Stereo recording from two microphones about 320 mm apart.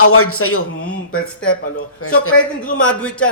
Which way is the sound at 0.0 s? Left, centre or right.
Left.